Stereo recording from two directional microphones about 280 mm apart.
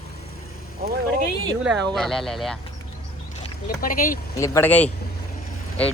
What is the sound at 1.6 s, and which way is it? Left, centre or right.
Speech, centre.